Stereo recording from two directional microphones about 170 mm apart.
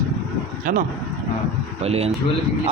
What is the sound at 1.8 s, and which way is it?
Speech, 35° right (ahead or behind).